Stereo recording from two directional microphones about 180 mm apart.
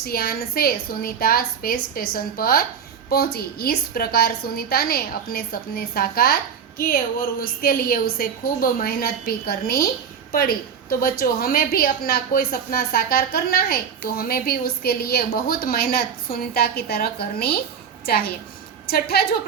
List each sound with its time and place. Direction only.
0.0 s a woman's voice: 55° left (ahead or behind)